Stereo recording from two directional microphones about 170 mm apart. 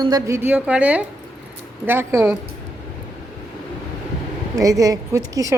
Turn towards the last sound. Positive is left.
turn(degrees=-20)  # may be behind; listen again after turning